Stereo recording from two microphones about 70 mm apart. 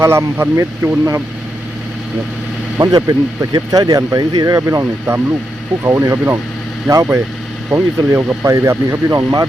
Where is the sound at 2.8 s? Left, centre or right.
Right.